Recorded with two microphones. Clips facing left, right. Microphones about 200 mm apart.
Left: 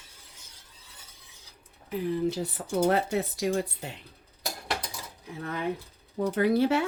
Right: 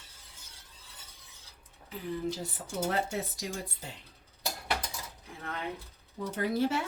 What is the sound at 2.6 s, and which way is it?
Speech, 65° left (ahead or behind).